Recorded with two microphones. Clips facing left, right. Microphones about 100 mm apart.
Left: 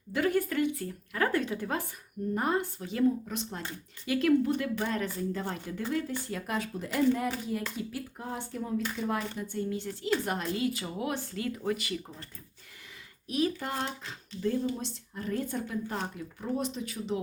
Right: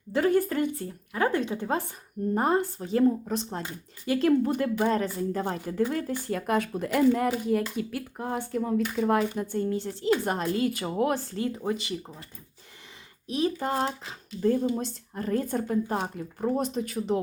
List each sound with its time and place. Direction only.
0.1 s speech: 35° right (ahead or behind)
0.8 s a woman's voice: 20° right (ahead or behind); by 11.2 s 50° right (ahead or behind)
11.3 s speech: 25° right (ahead or behind)
13.2 s speech: 30° right (ahead or behind)
14.4 s a woman's voice: 50° right (ahead or behind)